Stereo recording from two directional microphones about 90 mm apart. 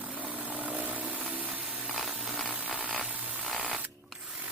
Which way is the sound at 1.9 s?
Centre (ahead or behind).